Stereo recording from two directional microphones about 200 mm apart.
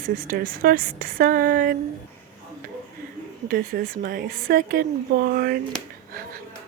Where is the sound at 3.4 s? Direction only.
45° right (ahead or behind).